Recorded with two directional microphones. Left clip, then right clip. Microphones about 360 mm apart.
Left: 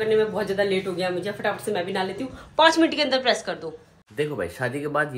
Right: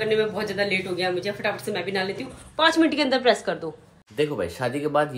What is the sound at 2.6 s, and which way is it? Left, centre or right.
Speech, centre.